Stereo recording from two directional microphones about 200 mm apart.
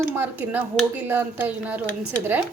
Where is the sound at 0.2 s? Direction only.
10° right (ahead or behind).